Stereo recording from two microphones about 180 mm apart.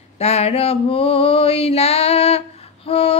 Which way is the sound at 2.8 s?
30° left (ahead or behind).